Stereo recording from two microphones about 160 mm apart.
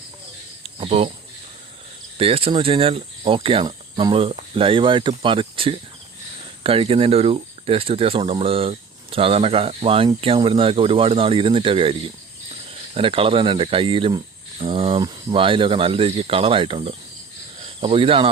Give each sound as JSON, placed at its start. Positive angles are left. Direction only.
{"t": 0.8, "sound": "speech", "side_deg": -40}
{"t": 2.1, "sound": "speech", "side_deg": -35}